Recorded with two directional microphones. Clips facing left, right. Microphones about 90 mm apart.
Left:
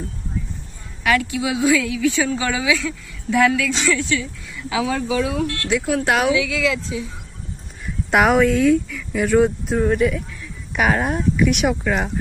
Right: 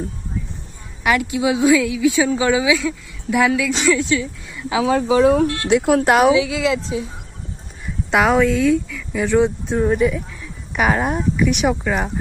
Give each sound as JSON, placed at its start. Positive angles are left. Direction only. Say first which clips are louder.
{"t": 1.0, "sound": "a woman's voice", "louder": "right 2 dB", "side_deg": -20}
{"t": 5.5, "sound": "a woman's voice", "louder": "right 5 dB", "side_deg": -20}
{"t": 5.8, "sound": "speech", "louder": "right 5 dB", "side_deg": -45}
{"t": 8.1, "sound": "a woman's voice", "louder": "even", "side_deg": 10}